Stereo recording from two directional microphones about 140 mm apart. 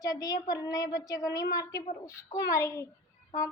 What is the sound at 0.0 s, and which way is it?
A child's voice, 25° left (ahead or behind).